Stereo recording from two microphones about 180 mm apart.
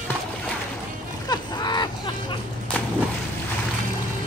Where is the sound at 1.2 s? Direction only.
25° left (ahead or behind).